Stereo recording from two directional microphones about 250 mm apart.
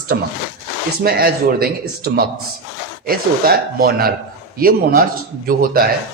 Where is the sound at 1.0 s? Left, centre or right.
Right.